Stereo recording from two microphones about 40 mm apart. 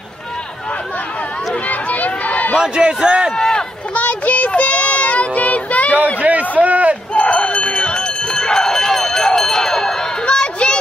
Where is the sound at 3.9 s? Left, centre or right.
Left.